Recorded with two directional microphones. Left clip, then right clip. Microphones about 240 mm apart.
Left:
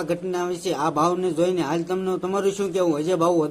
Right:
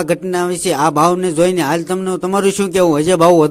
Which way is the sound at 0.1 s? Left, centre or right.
Right.